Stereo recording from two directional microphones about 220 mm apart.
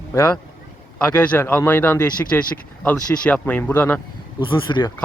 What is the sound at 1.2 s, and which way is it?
Speech, 5° left (ahead or behind).